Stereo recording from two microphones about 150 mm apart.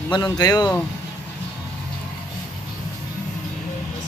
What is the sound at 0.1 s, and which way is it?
Speech, 25° left (ahead or behind).